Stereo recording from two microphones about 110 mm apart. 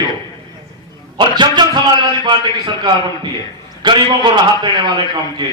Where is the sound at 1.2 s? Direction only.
45° right (ahead or behind).